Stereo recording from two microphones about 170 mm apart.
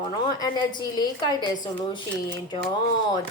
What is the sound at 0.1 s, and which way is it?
A woman's voice, 25° left (ahead or behind).